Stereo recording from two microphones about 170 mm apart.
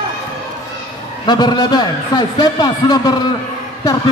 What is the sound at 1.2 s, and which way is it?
A man's voice, 25° left (ahead or behind).